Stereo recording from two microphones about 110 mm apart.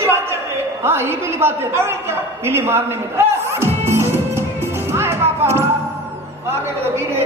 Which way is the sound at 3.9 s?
25° right (ahead or behind).